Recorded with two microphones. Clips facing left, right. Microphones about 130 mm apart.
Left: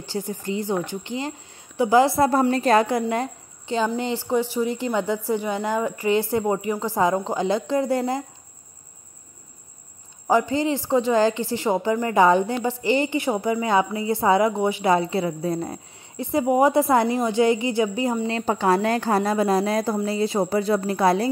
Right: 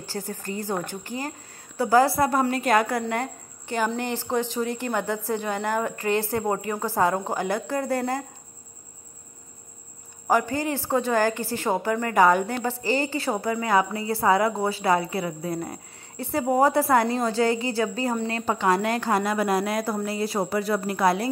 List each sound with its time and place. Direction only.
0.0 s a woman's voice: 20° left (ahead or behind)
10.3 s a woman's voice: 20° left (ahead or behind)